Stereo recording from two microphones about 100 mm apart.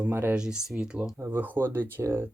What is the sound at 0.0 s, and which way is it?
Speech, 20° right (ahead or behind).